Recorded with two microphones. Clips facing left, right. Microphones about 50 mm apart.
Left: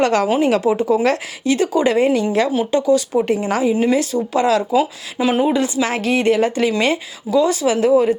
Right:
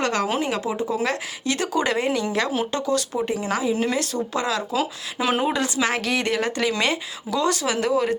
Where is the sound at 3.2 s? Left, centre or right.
Left.